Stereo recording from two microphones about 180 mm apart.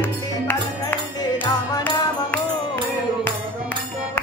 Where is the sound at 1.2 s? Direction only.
20° left (ahead or behind).